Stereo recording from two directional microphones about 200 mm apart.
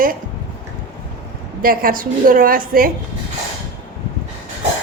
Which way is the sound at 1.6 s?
45° right (ahead or behind).